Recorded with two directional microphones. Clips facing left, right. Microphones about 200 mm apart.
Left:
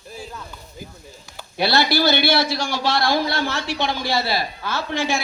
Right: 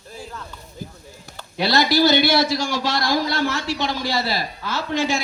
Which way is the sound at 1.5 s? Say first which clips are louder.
Even; 35° left (ahead or behind).